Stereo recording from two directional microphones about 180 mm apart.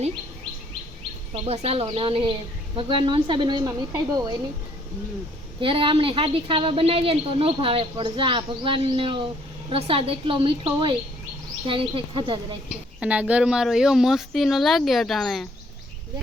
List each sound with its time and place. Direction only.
1.3 s a woman's voice: 35° right (ahead or behind)
5.5 s a woman's voice: 30° right (ahead or behind)
12.6 s speech: 5° right (ahead or behind)